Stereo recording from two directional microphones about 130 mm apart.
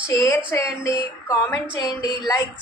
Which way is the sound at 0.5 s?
25° left (ahead or behind).